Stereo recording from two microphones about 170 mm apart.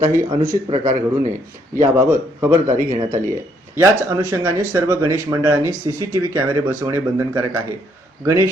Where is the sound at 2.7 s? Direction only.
50° right (ahead or behind).